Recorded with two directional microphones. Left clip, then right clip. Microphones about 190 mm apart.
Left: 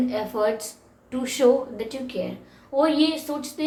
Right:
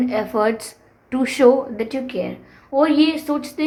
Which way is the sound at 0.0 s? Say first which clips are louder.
Right 5 dB; 45° right (ahead or behind).